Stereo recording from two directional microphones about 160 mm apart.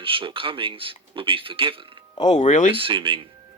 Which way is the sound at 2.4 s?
50° left (ahead or behind).